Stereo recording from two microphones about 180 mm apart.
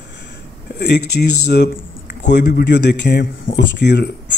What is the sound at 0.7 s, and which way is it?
Speech, 70° left (ahead or behind).